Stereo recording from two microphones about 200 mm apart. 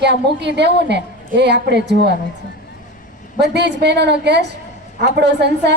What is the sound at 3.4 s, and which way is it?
A woman's voice, 60° right (ahead or behind).